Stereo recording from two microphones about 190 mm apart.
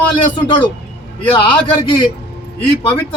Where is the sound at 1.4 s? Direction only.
25° left (ahead or behind).